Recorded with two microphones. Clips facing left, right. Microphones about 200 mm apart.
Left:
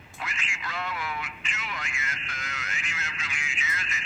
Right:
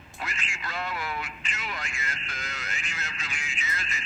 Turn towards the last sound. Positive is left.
turn(degrees=-35)  # may be behind; listen again after turning